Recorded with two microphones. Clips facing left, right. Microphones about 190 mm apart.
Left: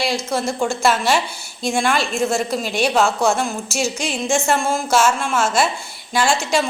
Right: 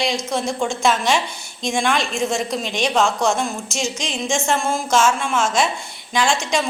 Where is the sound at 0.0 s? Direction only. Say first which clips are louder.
Left 1 dB; 5° left (ahead or behind).